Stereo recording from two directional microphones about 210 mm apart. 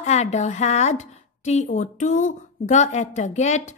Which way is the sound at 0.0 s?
30° left (ahead or behind).